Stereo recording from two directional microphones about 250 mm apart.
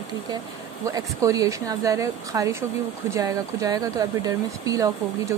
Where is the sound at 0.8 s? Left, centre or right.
Centre.